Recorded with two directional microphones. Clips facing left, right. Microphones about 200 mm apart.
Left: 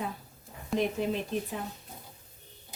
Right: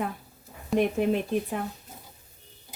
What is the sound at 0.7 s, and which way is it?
Speech, 60° right (ahead or behind).